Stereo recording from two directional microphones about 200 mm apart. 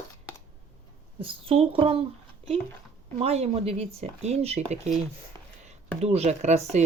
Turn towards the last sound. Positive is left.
turn(degrees=-35)  # may be behind; listen again after turning